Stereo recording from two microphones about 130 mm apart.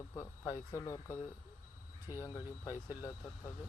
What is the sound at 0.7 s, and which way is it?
Speech, 20° left (ahead or behind).